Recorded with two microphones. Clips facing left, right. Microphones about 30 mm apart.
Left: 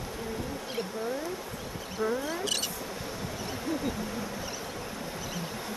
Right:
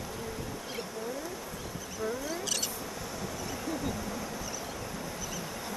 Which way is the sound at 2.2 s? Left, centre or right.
Left.